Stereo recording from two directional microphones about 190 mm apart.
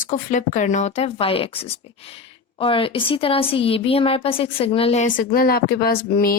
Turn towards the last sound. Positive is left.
turn(degrees=55)  # may be behind; listen again after turning